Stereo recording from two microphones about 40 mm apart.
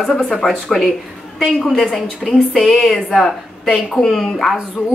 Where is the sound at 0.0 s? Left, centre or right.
Centre.